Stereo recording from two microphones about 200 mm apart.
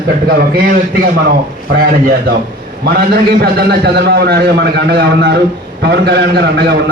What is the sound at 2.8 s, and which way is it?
A man's voice, 55° right (ahead or behind).